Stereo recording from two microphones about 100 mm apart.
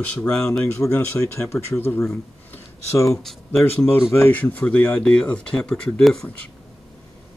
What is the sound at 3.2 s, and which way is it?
Speech, centre (ahead or behind).